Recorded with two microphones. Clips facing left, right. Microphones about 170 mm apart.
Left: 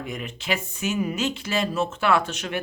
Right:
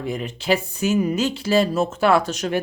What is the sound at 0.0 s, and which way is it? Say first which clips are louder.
Speech: right 6 dB; 30° right (ahead or behind).